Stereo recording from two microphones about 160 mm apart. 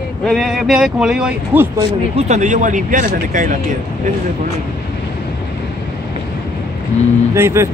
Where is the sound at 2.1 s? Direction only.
45° right (ahead or behind).